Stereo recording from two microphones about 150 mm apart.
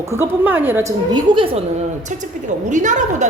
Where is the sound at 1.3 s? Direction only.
35° right (ahead or behind).